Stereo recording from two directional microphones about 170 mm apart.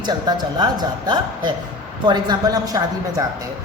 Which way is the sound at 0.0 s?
25° right (ahead or behind).